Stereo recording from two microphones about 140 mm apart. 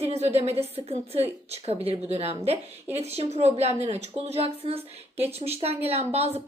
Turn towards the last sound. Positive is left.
turn(degrees=-50)  # may be behind; listen again after turning